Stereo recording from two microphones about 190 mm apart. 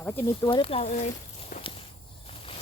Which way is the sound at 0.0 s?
10° left (ahead or behind).